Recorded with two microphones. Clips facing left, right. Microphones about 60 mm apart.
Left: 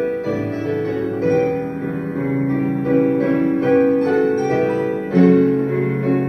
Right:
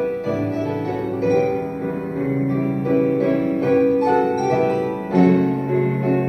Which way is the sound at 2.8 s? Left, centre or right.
Left.